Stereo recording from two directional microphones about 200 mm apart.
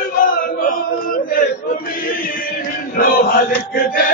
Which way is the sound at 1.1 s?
45° left (ahead or behind).